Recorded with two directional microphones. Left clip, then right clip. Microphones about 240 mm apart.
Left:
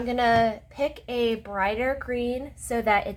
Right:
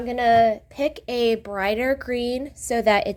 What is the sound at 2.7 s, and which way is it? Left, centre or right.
Speech, right.